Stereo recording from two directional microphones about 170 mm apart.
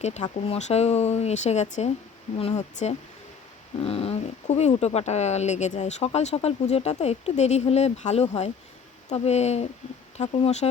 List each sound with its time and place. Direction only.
0.0 s speech: 40° left (ahead or behind)